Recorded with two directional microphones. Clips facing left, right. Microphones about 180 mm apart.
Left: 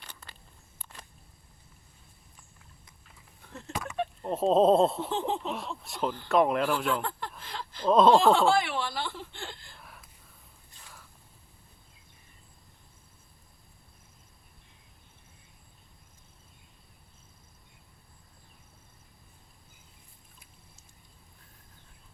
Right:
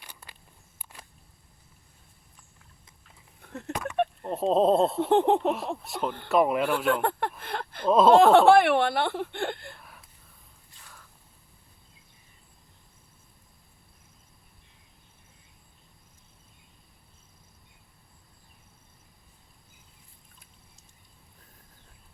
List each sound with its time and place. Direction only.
0.0 s walk: 10° right (ahead or behind)
3.4 s a sound: 60° right (ahead or behind)
4.2 s speech: centre (ahead or behind)
4.9 s speech: 60° right (ahead or behind)
5.8 s speech: centre (ahead or behind)
6.9 s speech: 60° right (ahead or behind)
7.9 s speech: 5° right (ahead or behind)
8.1 s speech: 60° right (ahead or behind)